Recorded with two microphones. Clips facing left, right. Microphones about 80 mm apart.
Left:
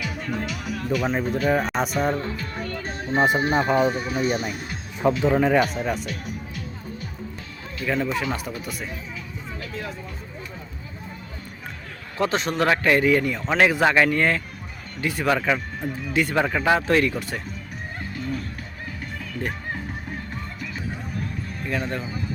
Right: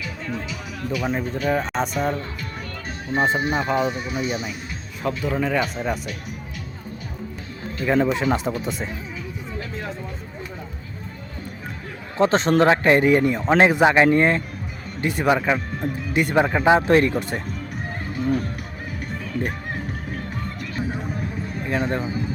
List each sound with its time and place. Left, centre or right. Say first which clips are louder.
0.3 s speech: left 2 dB; centre
3.1 s speech: left 1 dB; centre
3.4 s speech: left 2 dB; left
5.3 s speech: left 2 dB; centre
5.6 s speech: even; centre
7.9 s a man's voice: right 5 dB; right
12.1 s a man's voice: right 6 dB; right
18.1 s speech: right 8 dB; right
20.9 s a sound: right 3 dB; right